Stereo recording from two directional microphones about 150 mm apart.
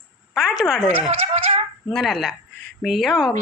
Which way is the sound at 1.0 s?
40° right (ahead or behind).